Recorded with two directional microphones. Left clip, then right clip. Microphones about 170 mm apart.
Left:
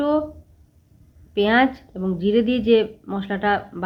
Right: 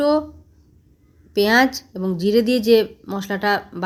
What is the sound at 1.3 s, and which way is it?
A woman's voice, 35° right (ahead or behind).